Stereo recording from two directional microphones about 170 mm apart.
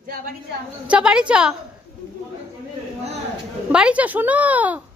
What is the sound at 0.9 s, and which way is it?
Speech, 5° right (ahead or behind).